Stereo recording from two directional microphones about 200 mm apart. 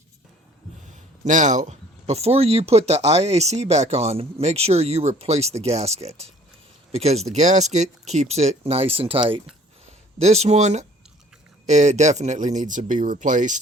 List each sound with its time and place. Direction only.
1.2 s speech: 35° right (ahead or behind)